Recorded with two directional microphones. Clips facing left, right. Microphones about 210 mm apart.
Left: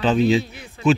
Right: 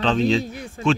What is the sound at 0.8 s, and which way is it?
Speech, 45° right (ahead or behind).